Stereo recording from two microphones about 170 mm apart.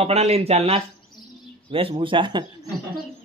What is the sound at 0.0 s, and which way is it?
Speech, 35° right (ahead or behind).